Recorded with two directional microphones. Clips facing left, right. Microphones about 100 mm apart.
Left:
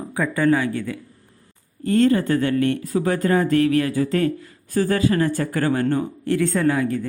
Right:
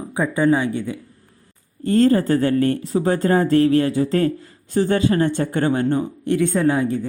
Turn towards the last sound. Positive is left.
turn(degrees=-20)  # may be behind; listen again after turning